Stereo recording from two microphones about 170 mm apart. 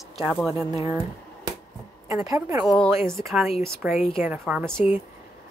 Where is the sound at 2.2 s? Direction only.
20° right (ahead or behind).